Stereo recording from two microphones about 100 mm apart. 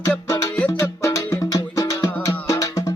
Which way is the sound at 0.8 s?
30° left (ahead or behind).